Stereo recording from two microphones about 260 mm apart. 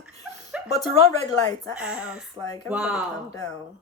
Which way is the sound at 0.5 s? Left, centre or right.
Centre.